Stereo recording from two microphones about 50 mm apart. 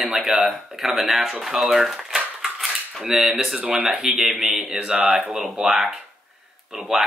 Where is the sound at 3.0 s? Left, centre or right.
Centre.